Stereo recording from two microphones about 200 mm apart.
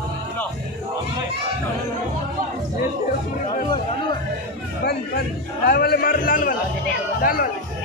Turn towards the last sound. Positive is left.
turn(degrees=45)  # may be behind; listen again after turning